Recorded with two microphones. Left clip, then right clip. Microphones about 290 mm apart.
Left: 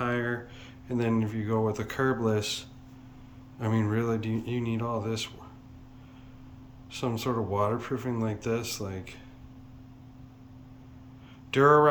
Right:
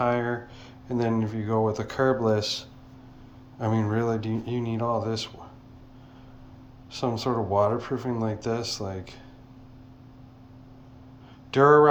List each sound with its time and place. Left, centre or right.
0.0 s a sound: centre
0.9 s speech: centre
6.9 s speech: centre
11.5 s speech: centre